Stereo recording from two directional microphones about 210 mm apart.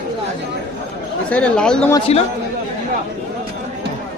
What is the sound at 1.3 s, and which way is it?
Speech, 5° left (ahead or behind).